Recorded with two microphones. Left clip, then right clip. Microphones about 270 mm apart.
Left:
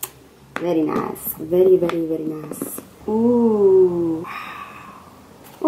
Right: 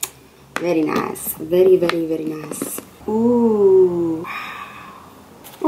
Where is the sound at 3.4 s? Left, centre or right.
Centre.